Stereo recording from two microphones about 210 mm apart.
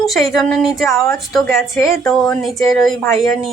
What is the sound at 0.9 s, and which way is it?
Speech, 15° left (ahead or behind).